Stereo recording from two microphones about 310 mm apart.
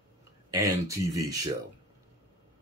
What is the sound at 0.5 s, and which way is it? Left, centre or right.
Speech, centre.